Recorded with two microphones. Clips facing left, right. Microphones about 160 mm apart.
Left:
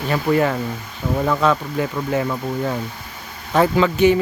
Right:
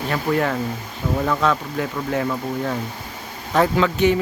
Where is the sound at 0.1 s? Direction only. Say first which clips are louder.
Left 3 dB; 5° left (ahead or behind).